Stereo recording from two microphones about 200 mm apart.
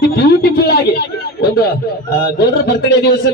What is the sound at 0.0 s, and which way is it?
Speech, 50° left (ahead or behind).